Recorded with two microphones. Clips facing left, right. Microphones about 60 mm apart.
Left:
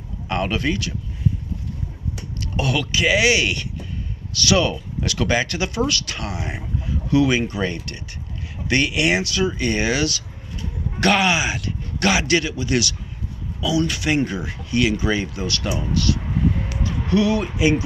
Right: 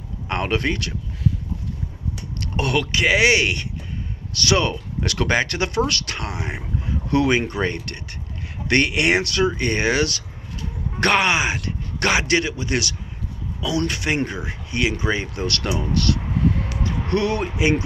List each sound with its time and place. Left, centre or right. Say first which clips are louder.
0.3 s speech: even; right
2.4 s speech: right 1 dB; right
7.1 s speech: left 1 dB; right
15.3 s speech: right 1 dB; right